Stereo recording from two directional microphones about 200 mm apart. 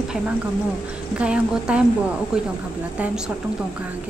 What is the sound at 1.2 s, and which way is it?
A woman's voice, 5° right (ahead or behind).